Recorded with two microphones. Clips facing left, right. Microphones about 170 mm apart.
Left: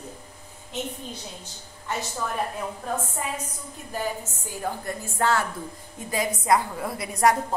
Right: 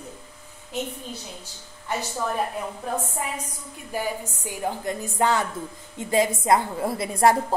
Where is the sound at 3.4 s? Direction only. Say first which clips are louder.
Left 1 dB; 10° right (ahead or behind).